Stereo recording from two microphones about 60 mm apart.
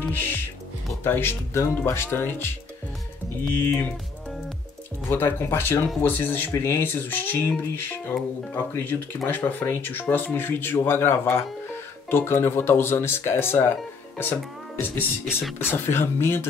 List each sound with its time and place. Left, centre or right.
0.1 s speech: left
5.1 s speech: left
15.6 s speech: left